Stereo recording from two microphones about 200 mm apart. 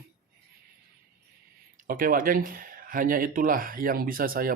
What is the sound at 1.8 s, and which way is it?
Speech, 45° right (ahead or behind).